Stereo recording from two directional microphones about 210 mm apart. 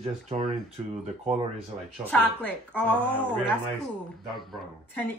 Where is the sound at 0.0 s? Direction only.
25° right (ahead or behind).